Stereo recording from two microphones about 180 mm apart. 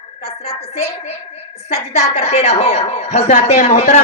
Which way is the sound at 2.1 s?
40° left (ahead or behind).